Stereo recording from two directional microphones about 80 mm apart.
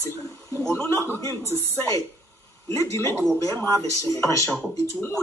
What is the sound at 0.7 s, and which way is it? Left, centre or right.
Speech, left.